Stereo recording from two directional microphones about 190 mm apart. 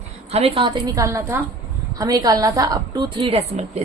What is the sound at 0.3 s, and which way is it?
A woman's voice, 30° right (ahead or behind).